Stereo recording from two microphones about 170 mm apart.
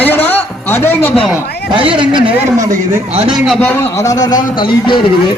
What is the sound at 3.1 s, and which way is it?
Speech, 35° right (ahead or behind).